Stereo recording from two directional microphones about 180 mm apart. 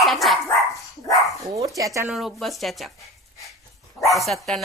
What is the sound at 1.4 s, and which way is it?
Speech, 20° right (ahead or behind).